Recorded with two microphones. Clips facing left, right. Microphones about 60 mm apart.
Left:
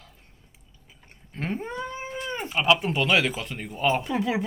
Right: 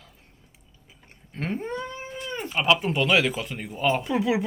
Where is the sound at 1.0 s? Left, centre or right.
Centre.